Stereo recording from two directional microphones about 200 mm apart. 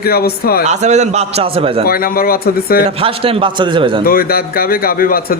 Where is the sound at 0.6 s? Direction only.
35° right (ahead or behind).